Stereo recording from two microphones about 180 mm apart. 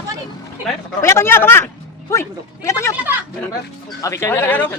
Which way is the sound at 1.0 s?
15° left (ahead or behind).